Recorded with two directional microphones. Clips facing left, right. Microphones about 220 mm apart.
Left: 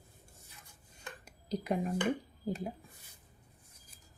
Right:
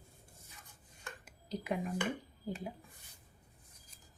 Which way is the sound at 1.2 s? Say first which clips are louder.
Left 4 dB; 40° left (ahead or behind).